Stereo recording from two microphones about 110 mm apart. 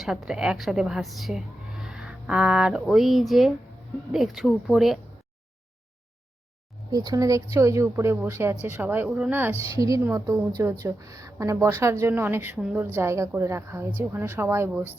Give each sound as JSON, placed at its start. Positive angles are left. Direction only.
{"t": 0.0, "sound": "speech", "side_deg": -5}
{"t": 6.9, "sound": "a woman's voice", "side_deg": -35}
{"t": 9.0, "sound": "a woman's voice", "side_deg": -5}
{"t": 9.3, "sound": "a woman's voice", "side_deg": -20}
{"t": 9.6, "sound": "a woman's voice", "side_deg": -30}
{"t": 12.5, "sound": "speech", "side_deg": -5}
{"t": 12.8, "sound": "a woman's voice", "side_deg": -20}